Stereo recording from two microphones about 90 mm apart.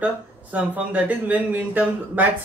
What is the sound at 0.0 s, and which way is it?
Speech, 20° right (ahead or behind).